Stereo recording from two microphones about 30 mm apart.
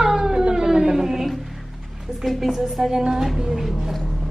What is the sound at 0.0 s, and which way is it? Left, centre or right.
Cat, right.